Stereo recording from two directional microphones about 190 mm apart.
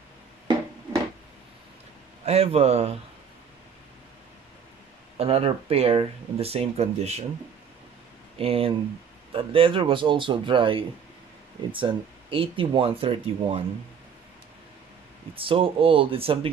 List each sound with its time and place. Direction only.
2.2 s speech: 35° right (ahead or behind)
5.1 s speech: 30° right (ahead or behind)
8.4 s speech: 30° right (ahead or behind)
15.3 s speech: 30° right (ahead or behind)